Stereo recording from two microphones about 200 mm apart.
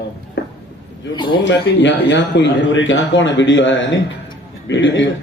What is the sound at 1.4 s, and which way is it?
A man's voice, 65° left (ahead or behind).